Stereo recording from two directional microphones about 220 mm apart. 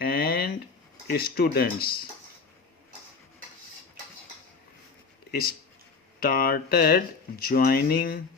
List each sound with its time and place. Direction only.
0.0 s a sound: 45° left (ahead or behind)
1.1 s speech: 45° left (ahead or behind)
5.3 s speech: 45° left (ahead or behind)